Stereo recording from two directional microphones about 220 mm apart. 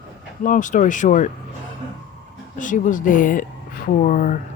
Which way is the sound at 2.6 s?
35° left (ahead or behind).